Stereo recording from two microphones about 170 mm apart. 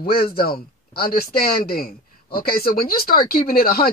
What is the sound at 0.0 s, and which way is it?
Speech, 60° left (ahead or behind).